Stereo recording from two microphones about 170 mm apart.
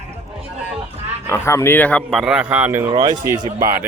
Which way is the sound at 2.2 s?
5° right (ahead or behind).